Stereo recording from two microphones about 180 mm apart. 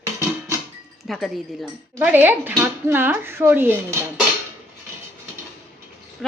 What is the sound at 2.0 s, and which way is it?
Speech, 10° right (ahead or behind).